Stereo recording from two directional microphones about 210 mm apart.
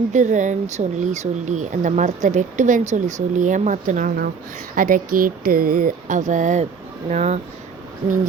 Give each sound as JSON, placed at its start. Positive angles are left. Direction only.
{"t": 0.1, "sound": "speech", "side_deg": -35}